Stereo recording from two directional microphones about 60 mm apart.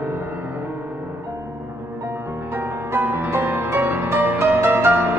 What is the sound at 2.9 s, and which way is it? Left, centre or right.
Music, right.